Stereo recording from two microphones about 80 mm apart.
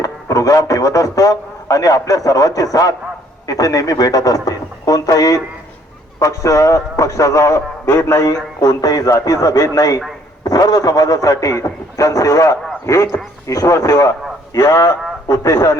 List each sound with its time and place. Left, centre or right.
0.0 s a man's voice: left